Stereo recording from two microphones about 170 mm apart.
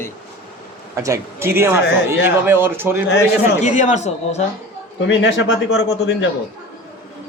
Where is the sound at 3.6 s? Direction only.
45° left (ahead or behind).